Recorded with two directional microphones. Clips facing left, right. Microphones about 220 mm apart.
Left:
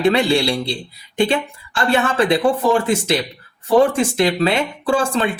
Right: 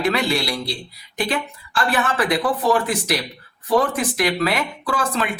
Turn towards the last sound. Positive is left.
turn(degrees=30)  # may be behind; listen again after turning